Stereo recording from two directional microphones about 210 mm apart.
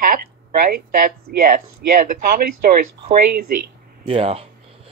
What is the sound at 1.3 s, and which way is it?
Speech, 45° right (ahead or behind).